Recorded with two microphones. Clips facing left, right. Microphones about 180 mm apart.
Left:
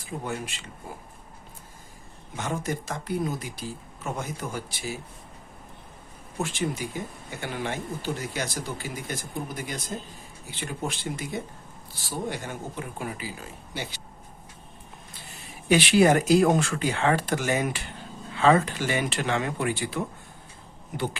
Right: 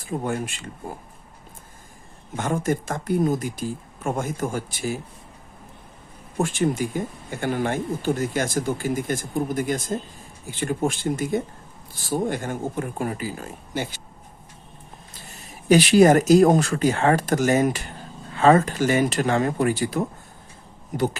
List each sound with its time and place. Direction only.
0.0 s speech: 50° right (ahead or behind)
2.3 s speech: 50° right (ahead or behind)
6.3 s speech: 45° right (ahead or behind)
15.1 s speech: 45° right (ahead or behind)